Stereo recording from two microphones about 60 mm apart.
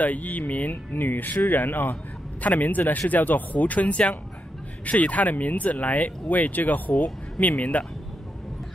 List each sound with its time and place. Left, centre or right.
0.0 s speech: left